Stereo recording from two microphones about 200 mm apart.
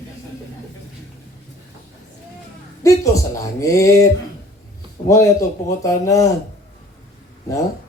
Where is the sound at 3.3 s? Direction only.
15° left (ahead or behind).